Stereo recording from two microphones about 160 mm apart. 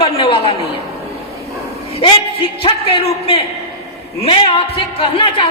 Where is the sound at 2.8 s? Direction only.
40° left (ahead or behind).